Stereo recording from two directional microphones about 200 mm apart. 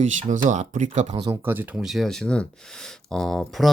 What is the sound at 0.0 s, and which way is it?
Speech, 35° right (ahead or behind).